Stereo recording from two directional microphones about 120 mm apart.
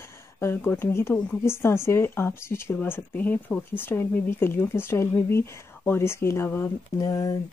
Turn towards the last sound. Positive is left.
turn(degrees=30)  # may be behind; listen again after turning